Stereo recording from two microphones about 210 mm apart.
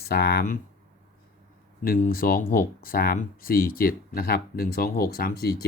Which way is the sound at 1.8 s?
45° left (ahead or behind).